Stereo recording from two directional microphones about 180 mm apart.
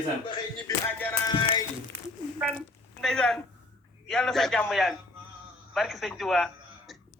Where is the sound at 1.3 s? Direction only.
25° left (ahead or behind).